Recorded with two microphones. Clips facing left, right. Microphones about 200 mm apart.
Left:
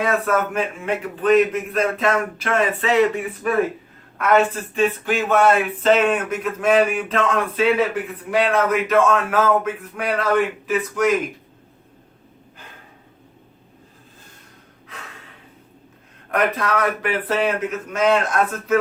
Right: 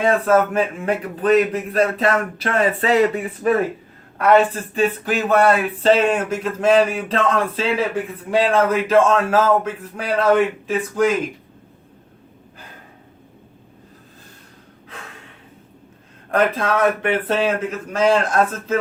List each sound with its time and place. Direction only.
0.0 s speech: 30° right (ahead or behind)
16.3 s speech: 25° right (ahead or behind)